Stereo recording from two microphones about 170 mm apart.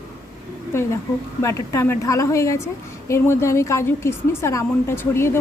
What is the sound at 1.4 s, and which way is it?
Speech, 15° left (ahead or behind).